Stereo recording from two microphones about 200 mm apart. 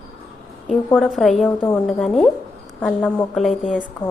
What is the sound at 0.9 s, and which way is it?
A woman's voice, centre (ahead or behind).